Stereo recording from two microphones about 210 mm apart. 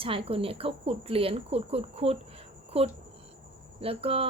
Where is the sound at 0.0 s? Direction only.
25° right (ahead or behind).